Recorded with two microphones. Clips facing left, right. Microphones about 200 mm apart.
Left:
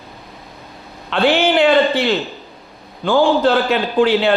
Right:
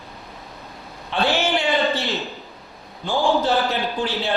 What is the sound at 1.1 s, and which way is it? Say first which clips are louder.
A man's voice: left 6 dB; 90° left.